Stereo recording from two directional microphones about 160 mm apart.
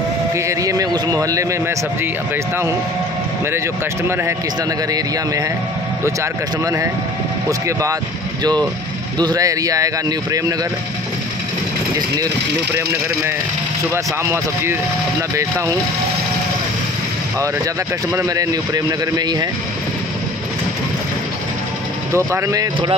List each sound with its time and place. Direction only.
0.5 s a man's voice: 20° right (ahead or behind)
6.6 s a man's voice: 20° right (ahead or behind)
9.2 s a man's voice: 20° right (ahead or behind)
13.9 s speech: 15° right (ahead or behind)
18.1 s a man's voice: 20° right (ahead or behind)
22.1 s a man's voice: 20° right (ahead or behind)